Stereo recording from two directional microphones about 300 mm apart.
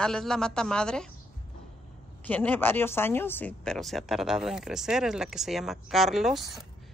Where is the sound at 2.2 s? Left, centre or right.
Centre.